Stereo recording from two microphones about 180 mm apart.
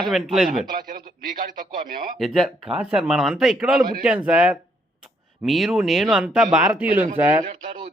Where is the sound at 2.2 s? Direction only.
Centre (ahead or behind).